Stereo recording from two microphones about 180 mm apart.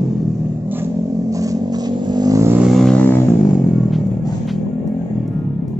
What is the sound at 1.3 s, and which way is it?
Vehicle, 20° right (ahead or behind).